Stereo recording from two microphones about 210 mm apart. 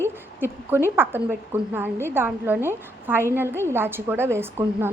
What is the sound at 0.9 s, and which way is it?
A woman's voice, 10° right (ahead or behind).